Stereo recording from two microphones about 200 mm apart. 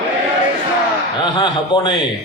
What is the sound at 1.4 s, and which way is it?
Speech, 20° left (ahead or behind).